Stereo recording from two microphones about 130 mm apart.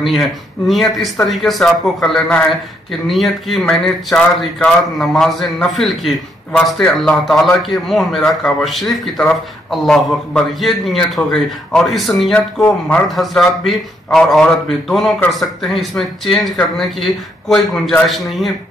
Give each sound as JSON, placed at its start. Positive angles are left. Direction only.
{"t": 0.0, "sound": "speech", "side_deg": 0}